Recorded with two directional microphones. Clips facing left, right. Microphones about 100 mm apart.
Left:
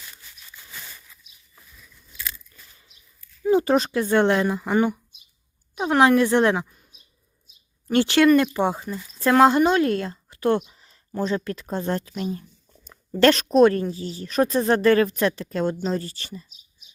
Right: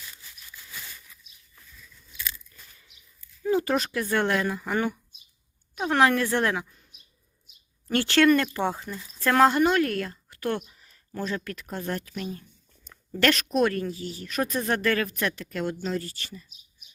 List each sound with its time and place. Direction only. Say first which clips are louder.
3.5 s speech: left 6 dB; 25° left (ahead or behind)
7.9 s a woman's voice: left 3 dB; 15° left (ahead or behind)